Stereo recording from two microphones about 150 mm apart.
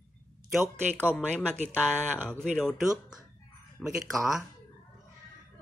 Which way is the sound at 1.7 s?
10° right (ahead or behind).